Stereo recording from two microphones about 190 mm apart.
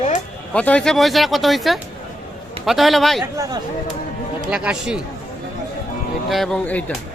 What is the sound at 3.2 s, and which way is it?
Speech, 20° right (ahead or behind).